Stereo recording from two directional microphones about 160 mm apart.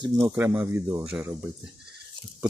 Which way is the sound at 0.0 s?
25° right (ahead or behind).